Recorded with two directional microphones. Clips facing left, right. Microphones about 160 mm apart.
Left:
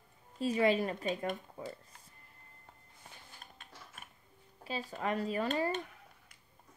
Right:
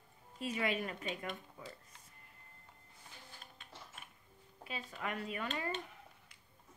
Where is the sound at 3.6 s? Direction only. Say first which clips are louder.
Left 1 dB; 45° left (ahead or behind).